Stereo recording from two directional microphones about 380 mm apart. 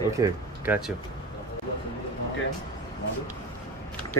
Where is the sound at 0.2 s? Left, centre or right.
Centre.